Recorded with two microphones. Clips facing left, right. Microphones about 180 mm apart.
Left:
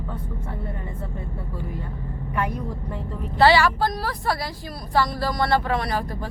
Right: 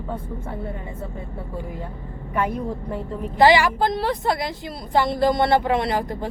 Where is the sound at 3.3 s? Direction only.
15° right (ahead or behind).